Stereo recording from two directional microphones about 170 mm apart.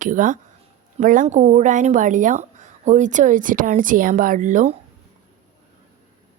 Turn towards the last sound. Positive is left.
turn(degrees=-45)  # may be behind; listen again after turning